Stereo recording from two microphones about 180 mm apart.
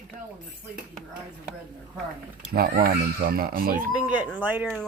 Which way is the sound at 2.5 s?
55° right (ahead or behind).